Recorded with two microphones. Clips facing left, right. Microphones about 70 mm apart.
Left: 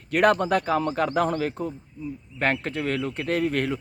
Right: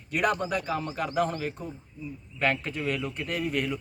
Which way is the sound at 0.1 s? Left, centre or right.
Left.